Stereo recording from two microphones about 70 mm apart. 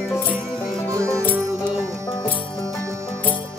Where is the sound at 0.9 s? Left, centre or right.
Right.